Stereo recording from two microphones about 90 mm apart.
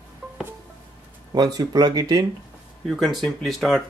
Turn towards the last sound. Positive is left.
turn(degrees=0)  # may be behind; listen again after turning